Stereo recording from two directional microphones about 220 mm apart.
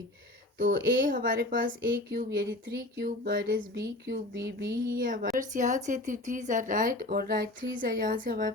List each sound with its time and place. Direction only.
0.6 s a woman's voice: 40° right (ahead or behind)